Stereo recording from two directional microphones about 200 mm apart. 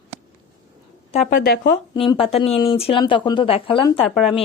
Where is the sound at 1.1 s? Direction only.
35° left (ahead or behind).